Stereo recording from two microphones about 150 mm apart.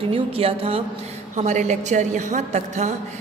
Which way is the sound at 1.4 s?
50° right (ahead or behind).